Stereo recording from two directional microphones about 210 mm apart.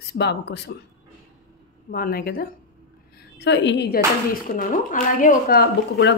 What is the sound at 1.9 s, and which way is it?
Speech, 45° left (ahead or behind).